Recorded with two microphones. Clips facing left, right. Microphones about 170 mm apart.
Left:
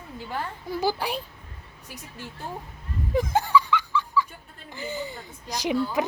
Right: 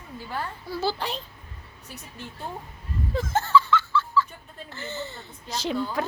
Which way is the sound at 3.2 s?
15° left (ahead or behind).